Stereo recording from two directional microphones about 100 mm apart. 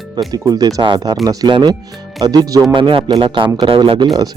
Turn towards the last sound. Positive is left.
turn(degrees=-55)  # may be behind; listen again after turning